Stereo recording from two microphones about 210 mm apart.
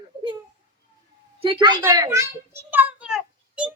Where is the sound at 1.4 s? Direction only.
25° right (ahead or behind).